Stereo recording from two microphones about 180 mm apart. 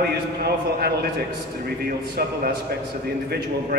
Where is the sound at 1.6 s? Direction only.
60° right (ahead or behind).